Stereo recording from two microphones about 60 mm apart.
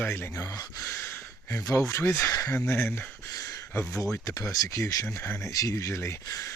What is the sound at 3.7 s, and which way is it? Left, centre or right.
Speech, left.